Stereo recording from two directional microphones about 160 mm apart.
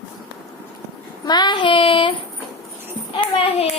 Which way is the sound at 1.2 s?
25° left (ahead or behind).